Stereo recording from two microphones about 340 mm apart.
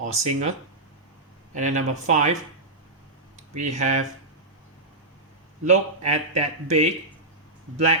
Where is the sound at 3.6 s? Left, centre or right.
Right.